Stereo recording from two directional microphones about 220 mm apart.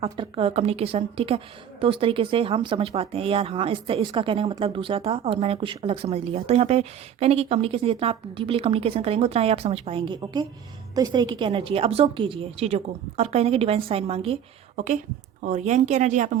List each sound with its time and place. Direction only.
0.0 s speech: 25° right (ahead or behind)
15.4 s speech: 35° right (ahead or behind)